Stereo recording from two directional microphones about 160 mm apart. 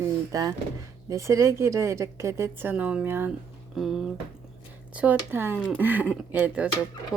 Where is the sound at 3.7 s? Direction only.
Centre (ahead or behind).